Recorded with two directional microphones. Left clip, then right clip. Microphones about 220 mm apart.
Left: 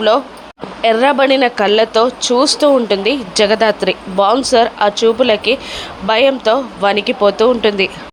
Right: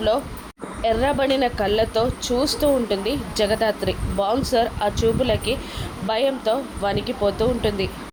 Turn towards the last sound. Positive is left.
turn(degrees=20)  # may be behind; listen again after turning